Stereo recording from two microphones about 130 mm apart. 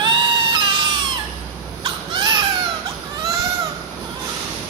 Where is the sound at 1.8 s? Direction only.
35° right (ahead or behind).